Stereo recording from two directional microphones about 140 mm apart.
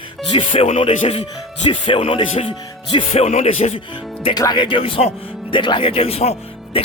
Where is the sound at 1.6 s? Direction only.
40° left (ahead or behind).